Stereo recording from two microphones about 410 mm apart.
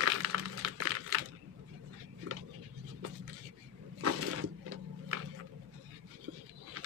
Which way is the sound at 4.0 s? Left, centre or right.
Right.